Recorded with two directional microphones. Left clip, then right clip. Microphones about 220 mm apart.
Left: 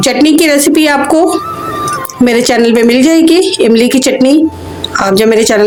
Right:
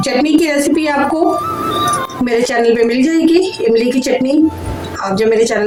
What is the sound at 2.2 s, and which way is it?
A woman's voice, 45° left (ahead or behind).